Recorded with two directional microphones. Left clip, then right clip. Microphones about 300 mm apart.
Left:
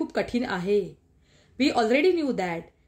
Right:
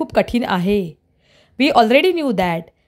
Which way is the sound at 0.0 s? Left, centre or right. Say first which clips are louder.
Right 10 dB; right.